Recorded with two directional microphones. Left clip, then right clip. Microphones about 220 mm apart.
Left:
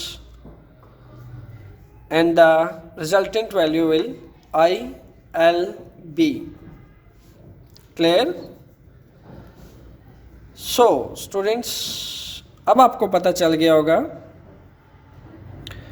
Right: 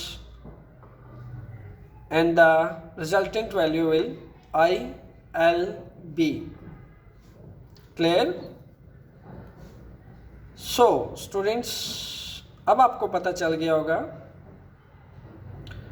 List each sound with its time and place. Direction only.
2.0 s speech: 50° left (ahead or behind)
7.9 s speech: 50° left (ahead or behind)
10.6 s speech: 45° left (ahead or behind)
15.7 s scissors: 45° left (ahead or behind)